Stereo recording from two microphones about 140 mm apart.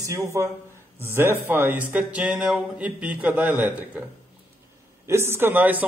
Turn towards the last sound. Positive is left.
turn(degrees=-10)  # may be behind; listen again after turning